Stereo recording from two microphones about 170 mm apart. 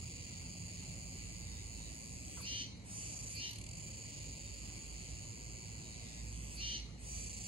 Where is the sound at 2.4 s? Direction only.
30° right (ahead or behind).